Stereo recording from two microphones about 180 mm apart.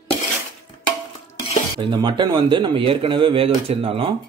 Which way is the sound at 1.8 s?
25° right (ahead or behind).